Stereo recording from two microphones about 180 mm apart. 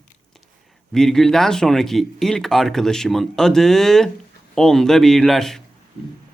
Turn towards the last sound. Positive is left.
turn(degrees=0)  # may be behind; listen again after turning